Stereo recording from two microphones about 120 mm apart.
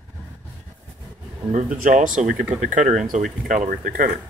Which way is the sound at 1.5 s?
90° right.